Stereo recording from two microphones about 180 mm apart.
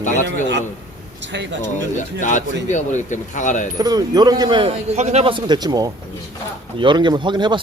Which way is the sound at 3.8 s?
20° right (ahead or behind).